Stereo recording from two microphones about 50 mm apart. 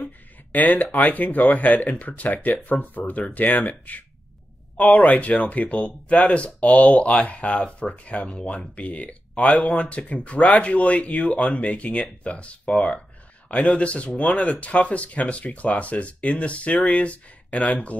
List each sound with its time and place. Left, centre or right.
0.5 s speech: left